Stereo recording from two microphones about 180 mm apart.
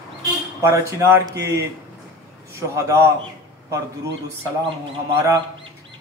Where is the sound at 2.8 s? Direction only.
15° right (ahead or behind).